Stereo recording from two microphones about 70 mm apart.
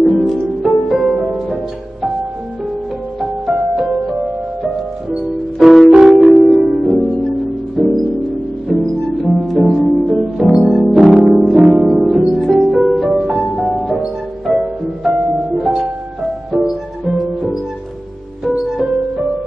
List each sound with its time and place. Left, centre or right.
0.0 s music: centre
3.2 s music: centre
17.0 s music: centre
18.4 s music: centre